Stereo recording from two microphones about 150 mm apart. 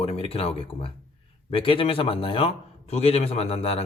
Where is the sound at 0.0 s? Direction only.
40° left (ahead or behind).